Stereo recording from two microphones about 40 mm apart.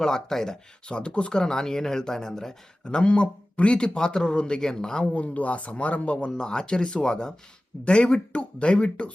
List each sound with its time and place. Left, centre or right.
0.0 s speech: centre
2.8 s speech: left
5.1 s speech: left